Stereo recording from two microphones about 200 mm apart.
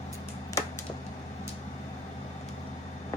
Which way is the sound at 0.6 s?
15° left (ahead or behind).